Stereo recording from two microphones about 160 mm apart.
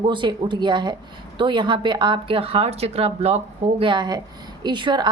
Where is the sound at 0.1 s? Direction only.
30° right (ahead or behind).